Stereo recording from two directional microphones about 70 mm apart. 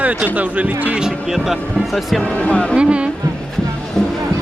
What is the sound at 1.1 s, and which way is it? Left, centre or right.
Speech, centre.